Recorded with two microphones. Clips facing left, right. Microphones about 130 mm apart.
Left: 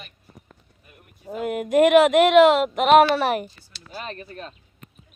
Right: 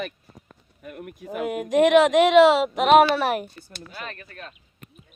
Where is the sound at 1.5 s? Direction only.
Centre (ahead or behind).